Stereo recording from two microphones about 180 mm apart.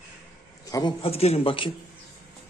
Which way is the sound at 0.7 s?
30° left (ahead or behind).